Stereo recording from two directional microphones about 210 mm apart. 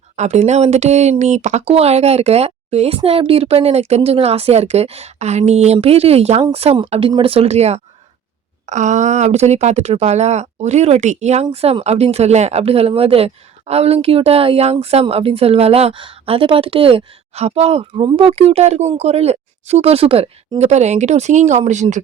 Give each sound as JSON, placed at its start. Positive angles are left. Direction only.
{"t": 0.2, "sound": "speech", "side_deg": -35}